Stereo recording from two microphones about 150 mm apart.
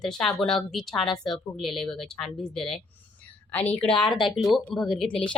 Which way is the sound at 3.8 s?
5° left (ahead or behind).